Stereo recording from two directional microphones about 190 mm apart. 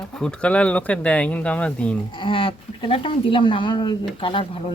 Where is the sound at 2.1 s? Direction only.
25° left (ahead or behind).